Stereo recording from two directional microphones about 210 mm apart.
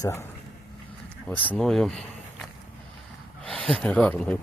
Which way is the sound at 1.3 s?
5° left (ahead or behind).